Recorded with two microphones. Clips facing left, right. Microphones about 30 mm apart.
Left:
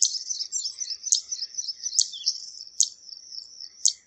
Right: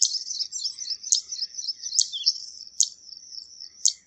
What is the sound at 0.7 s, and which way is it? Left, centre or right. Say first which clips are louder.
Chirp: right 1 dB; centre.